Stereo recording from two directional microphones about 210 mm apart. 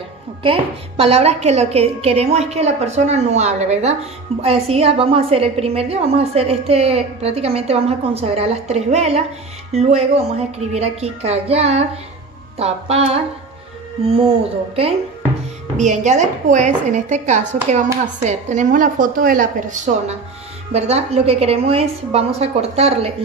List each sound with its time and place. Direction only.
0.4 s a woman's voice: 25° right (ahead or behind)
15.8 s a woman's voice: 35° right (ahead or behind)